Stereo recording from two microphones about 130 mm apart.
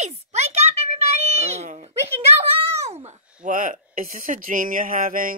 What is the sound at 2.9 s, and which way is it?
A child's voice, 70° right (ahead or behind).